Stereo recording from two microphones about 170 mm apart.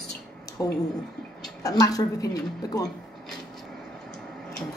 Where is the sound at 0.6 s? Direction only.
15° left (ahead or behind).